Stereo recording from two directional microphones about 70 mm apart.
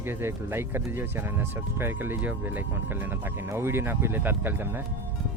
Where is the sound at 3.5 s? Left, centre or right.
Right.